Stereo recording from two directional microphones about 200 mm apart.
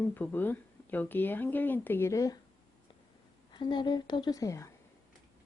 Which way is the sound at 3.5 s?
20° left (ahead or behind).